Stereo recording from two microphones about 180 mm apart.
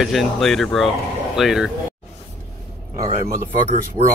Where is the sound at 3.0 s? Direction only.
35° right (ahead or behind).